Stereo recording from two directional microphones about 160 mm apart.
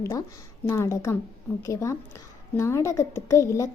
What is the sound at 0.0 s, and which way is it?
A woman's voice, 20° left (ahead or behind).